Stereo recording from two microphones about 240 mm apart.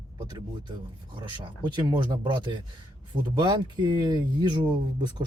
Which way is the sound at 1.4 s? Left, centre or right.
Centre.